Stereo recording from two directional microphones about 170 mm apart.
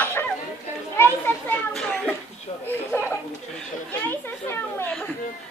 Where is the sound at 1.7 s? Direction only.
5° left (ahead or behind).